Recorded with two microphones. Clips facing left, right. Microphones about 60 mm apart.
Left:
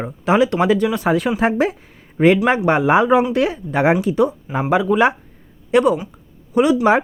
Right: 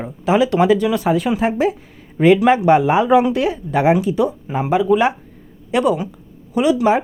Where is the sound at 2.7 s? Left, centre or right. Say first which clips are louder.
Left 1 dB; left.